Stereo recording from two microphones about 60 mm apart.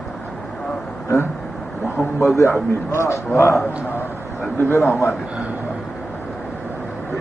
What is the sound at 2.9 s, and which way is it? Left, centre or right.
Speech, left.